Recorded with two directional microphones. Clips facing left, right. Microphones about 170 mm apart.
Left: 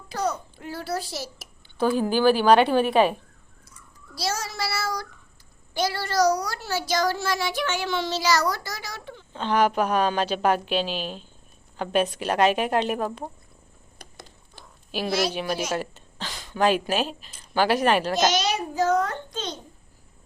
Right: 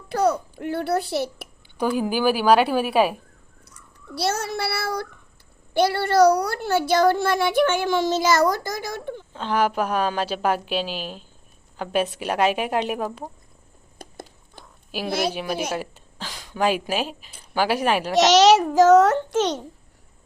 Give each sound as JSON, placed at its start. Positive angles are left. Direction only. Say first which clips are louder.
{"t": 0.1, "sound": "a child's voice", "louder": "right 7 dB", "side_deg": -55}
{"t": 1.8, "sound": "a woman's voice", "louder": "left 1 dB", "side_deg": -10}
{"t": 3.7, "sound": "a child's voice", "louder": "right 9 dB", "side_deg": -65}
{"t": 9.3, "sound": "a woman's voice", "louder": "left 1 dB", "side_deg": -5}
{"t": 14.0, "sound": "a sound", "louder": "right 7 dB", "side_deg": -50}
{"t": 14.6, "sound": "a sound", "louder": "even", "side_deg": -10}
{"t": 15.3, "sound": "a woman's voice", "louder": "right 1 dB", "side_deg": -10}
{"t": 18.1, "sound": "a child's voice", "louder": "right 9 dB", "side_deg": -80}